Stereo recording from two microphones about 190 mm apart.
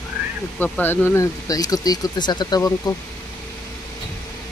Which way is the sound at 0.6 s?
10° left (ahead or behind).